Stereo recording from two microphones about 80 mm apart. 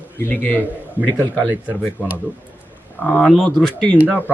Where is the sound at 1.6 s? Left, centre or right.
Centre.